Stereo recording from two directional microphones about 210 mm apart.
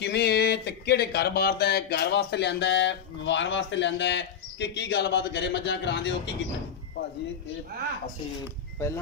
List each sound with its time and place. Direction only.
0.0 s speech: 50° left (ahead or behind)
8.7 s speech: 15° left (ahead or behind)